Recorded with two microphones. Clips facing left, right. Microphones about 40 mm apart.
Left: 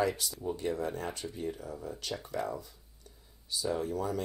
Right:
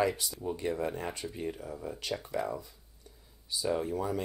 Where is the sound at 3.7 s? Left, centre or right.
Centre.